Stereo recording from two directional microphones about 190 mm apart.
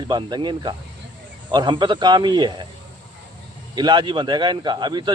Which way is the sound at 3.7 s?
25° right (ahead or behind).